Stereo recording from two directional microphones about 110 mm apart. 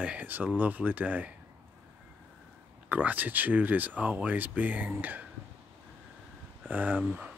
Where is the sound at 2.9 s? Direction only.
15° right (ahead or behind).